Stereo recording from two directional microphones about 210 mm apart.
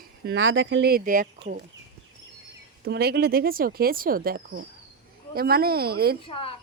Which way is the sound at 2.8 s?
50° right (ahead or behind).